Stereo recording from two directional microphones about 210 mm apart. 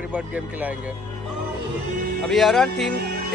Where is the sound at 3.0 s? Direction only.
50° right (ahead or behind).